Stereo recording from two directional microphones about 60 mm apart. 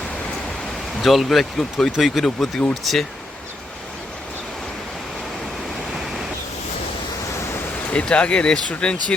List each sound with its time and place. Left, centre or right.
1.0 s speech: centre
7.9 s speech: left